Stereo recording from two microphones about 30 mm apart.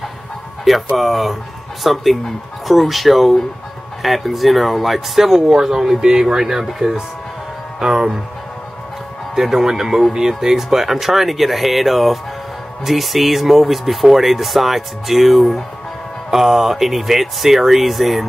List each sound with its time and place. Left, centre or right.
0.9 s speech: centre
9.3 s speech: centre